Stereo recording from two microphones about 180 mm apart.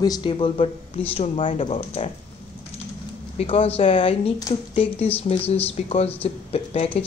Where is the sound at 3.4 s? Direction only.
30° left (ahead or behind).